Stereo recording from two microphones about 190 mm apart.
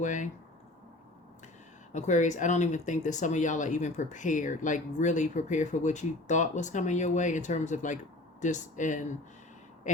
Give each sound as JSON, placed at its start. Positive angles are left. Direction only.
{"t": 0.0, "sound": "speech", "side_deg": 40}
{"t": 1.9, "sound": "speech", "side_deg": 40}